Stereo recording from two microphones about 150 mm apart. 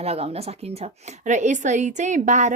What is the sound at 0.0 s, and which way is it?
Speech, 45° right (ahead or behind).